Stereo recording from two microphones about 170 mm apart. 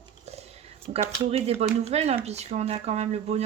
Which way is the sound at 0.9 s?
40° right (ahead or behind).